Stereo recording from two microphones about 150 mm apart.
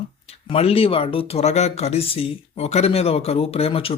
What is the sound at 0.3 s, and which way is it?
Speech, 40° left (ahead or behind).